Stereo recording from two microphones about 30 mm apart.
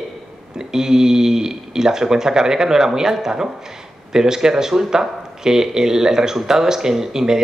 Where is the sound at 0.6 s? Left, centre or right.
Centre.